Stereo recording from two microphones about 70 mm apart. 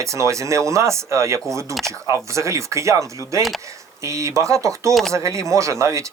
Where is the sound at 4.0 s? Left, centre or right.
Right.